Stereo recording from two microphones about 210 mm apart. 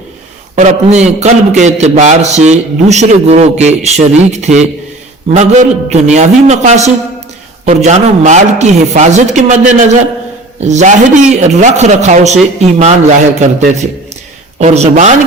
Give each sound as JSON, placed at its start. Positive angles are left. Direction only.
{"t": 0.5, "sound": "a man's voice", "side_deg": -35}
{"t": 14.6, "sound": "a man's voice", "side_deg": -35}